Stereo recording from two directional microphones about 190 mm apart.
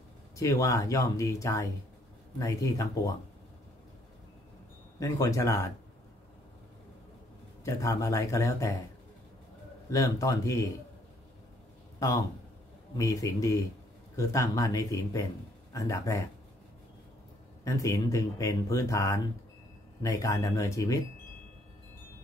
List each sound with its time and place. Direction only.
0.4 s speech: 15° left (ahead or behind)
5.0 s speech: 15° left (ahead or behind)
7.6 s speech: 15° left (ahead or behind)
9.8 s speech: 15° left (ahead or behind)
12.0 s speech: 15° left (ahead or behind)
17.6 s speech: 15° left (ahead or behind)